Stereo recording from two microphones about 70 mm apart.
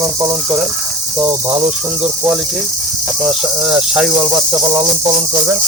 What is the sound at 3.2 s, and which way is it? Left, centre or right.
Cricket, centre.